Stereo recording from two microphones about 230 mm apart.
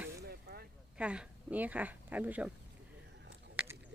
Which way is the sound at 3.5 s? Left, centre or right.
Centre.